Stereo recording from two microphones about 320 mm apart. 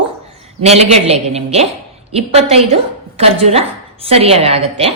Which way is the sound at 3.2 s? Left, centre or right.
Centre.